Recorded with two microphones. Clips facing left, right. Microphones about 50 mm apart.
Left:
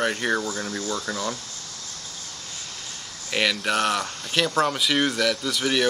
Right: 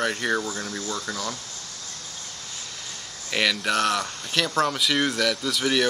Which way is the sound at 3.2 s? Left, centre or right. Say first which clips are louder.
Even; centre.